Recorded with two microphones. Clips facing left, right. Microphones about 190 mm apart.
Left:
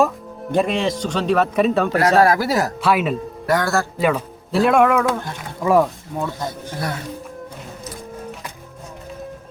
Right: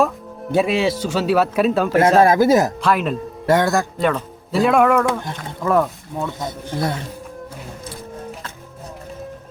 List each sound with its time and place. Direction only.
0.0 s speech: centre (ahead or behind)
2.2 s speech: 20° right (ahead or behind)
2.8 s speech: 5° left (ahead or behind)
3.4 s a man's voice: 25° right (ahead or behind)
3.9 s speech: 5° left (ahead or behind)